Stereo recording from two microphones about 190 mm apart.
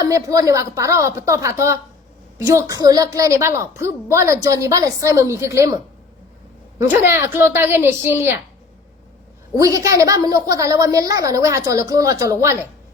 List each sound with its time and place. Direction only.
0.0 s a woman's voice: 20° right (ahead or behind)
6.8 s a woman's voice: 10° right (ahead or behind)
9.6 s a woman's voice: 15° right (ahead or behind)